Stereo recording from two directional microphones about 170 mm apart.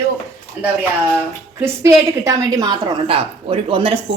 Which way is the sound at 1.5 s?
15° right (ahead or behind).